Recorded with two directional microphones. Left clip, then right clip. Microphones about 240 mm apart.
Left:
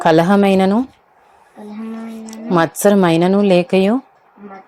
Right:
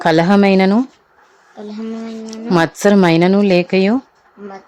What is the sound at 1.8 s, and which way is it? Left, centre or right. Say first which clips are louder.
A woman's voice: right 3 dB; centre.